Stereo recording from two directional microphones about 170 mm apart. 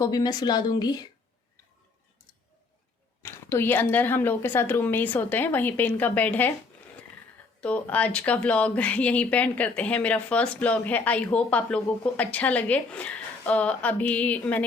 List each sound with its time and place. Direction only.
0.0 s speech: 25° left (ahead or behind)
3.2 s speech: 15° left (ahead or behind)
7.6 s speech: 10° left (ahead or behind)